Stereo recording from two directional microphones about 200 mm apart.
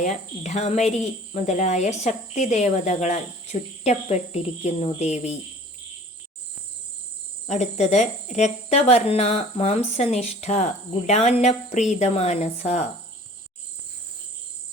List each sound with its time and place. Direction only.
0.0 s speech: 35° left (ahead or behind)
7.4 s speech: 35° left (ahead or behind)